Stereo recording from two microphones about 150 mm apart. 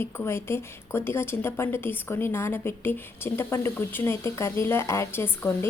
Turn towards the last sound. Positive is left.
turn(degrees=15)  # may be behind; listen again after turning